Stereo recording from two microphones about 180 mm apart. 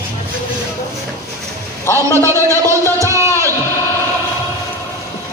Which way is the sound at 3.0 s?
15° right (ahead or behind).